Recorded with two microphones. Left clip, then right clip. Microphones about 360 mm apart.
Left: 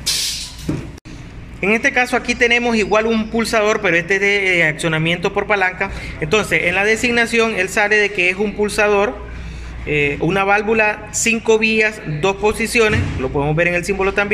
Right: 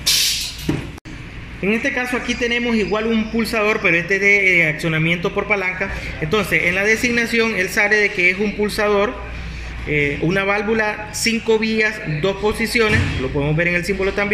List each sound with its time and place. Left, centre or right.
1.6 s a man's voice: left